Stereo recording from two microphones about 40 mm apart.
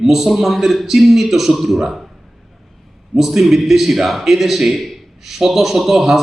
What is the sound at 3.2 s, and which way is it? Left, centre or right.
A man's voice, centre.